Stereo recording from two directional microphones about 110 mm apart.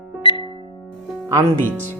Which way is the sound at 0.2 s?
50° left (ahead or behind).